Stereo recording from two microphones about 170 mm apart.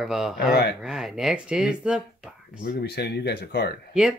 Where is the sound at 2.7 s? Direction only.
70° left (ahead or behind).